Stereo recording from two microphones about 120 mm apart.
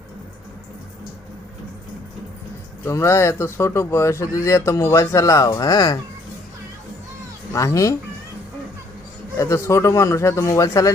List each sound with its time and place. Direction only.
2.8 s speech: 25° left (ahead or behind)
7.5 s speech: 25° left (ahead or behind)
9.4 s speech: 25° left (ahead or behind)